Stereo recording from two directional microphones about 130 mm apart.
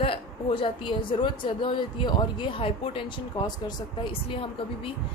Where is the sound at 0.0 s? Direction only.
45° left (ahead or behind).